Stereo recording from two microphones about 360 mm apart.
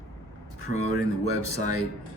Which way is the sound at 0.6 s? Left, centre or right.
Right.